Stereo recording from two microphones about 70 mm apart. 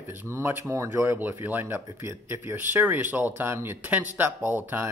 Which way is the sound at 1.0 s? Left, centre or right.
Right.